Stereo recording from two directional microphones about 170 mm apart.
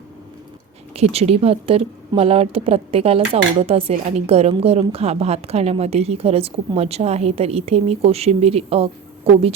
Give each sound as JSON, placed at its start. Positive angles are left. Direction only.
{"t": 0.9, "sound": "a woman's voice", "side_deg": -35}